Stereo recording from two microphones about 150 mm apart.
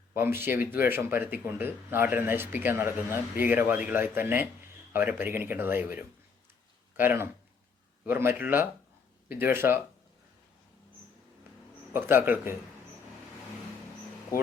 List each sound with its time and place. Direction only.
0.1 s speech: 15° right (ahead or behind)
11.9 s speech: 15° right (ahead or behind)